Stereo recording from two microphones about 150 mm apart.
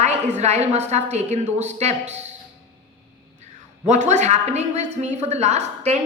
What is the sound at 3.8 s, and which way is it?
A woman's voice, 50° right (ahead or behind).